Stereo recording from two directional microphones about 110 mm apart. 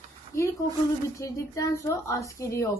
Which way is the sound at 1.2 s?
30° left (ahead or behind).